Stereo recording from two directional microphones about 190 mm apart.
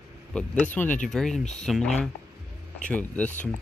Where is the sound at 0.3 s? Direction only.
5° left (ahead or behind).